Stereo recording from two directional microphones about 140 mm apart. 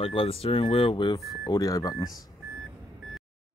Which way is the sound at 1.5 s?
25° left (ahead or behind).